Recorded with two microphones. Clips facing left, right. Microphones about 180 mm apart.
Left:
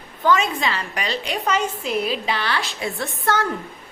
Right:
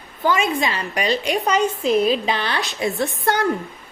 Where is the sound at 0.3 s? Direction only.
10° right (ahead or behind).